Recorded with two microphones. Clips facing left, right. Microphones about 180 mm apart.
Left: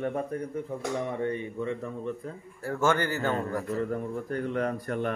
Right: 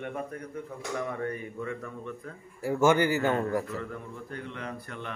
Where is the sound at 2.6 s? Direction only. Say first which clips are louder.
Right 3 dB; 10° right (ahead or behind).